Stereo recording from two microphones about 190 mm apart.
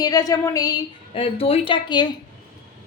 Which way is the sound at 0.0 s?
20° left (ahead or behind).